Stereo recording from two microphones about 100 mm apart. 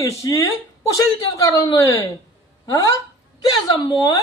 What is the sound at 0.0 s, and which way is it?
A woman's voice, 35° left (ahead or behind).